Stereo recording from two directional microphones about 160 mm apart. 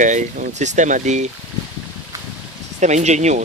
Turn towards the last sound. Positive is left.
turn(degrees=-45)  # may be behind; listen again after turning